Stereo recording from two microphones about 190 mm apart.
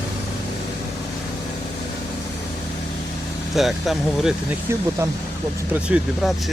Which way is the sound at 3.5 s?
Centre (ahead or behind).